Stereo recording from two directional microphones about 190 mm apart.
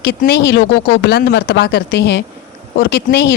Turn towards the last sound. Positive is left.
turn(degrees=60)  # may be behind; listen again after turning